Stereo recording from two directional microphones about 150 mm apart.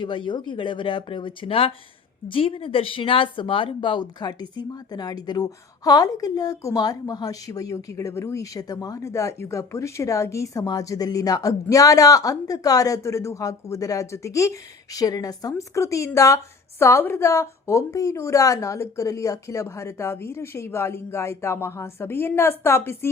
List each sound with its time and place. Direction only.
0.0 s speech: 30° left (ahead or behind); by 23.0 s 15° left (ahead or behind)